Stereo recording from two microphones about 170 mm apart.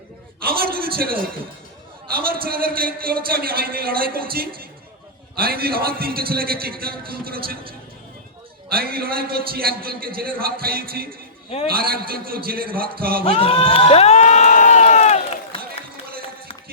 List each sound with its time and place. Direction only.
0.4 s a man's voice: 60° right (ahead or behind)
8.7 s a man's voice: 60° right (ahead or behind)
13.2 s crowd: 35° left (ahead or behind)